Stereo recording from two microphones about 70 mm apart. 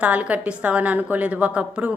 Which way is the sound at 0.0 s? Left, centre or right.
Right.